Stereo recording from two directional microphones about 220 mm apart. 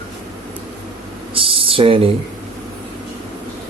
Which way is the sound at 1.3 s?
25° right (ahead or behind).